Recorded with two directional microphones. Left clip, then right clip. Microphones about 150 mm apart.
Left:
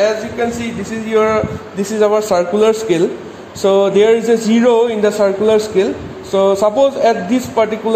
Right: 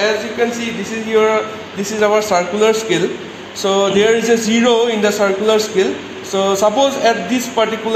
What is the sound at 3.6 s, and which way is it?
A man's voice, 70° left (ahead or behind).